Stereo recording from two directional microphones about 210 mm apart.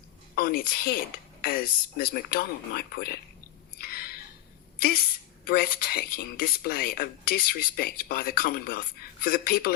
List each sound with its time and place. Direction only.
0.3 s speech: 45° left (ahead or behind)
3.8 s a sound: 45° left (ahead or behind)
5.5 s speech: 45° left (ahead or behind)